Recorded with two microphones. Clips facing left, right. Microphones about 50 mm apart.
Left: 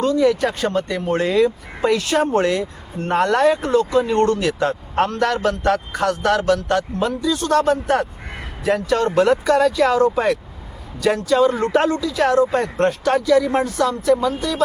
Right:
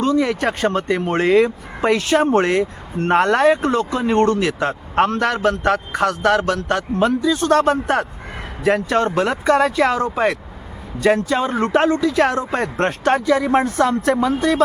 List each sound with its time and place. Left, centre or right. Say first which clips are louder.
0.0 s speech: left 1 dB; right